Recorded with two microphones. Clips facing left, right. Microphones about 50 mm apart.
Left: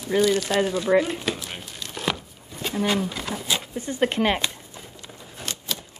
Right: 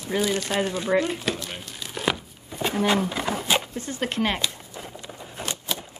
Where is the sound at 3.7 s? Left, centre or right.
Centre.